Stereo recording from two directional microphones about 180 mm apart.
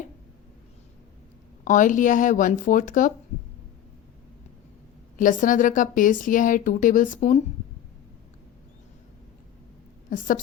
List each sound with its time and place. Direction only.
1.6 s speech: 45° left (ahead or behind)
5.1 s speech: 45° left (ahead or behind)
10.1 s speech: 50° left (ahead or behind)